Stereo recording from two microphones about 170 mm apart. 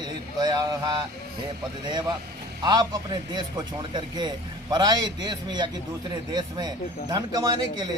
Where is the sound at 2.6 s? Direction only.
25° right (ahead or behind).